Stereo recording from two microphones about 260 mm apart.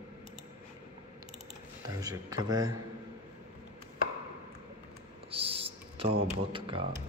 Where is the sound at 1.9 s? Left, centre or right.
Centre.